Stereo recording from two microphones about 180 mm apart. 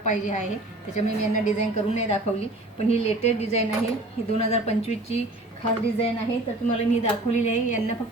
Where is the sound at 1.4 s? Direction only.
40° left (ahead or behind).